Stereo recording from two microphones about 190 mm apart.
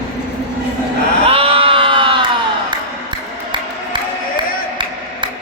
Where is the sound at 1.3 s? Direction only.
30° right (ahead or behind).